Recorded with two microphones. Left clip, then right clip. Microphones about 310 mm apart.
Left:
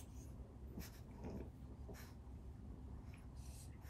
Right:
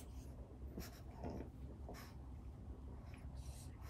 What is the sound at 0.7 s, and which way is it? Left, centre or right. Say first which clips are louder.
Dog: right 3 dB; centre.